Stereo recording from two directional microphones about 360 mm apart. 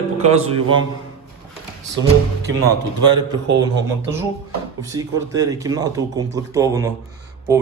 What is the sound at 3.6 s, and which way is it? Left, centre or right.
Speech, centre.